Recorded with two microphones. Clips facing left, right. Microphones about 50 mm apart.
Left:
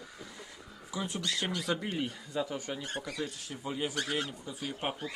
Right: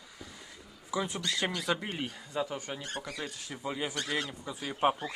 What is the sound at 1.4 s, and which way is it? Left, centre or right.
Speech, right.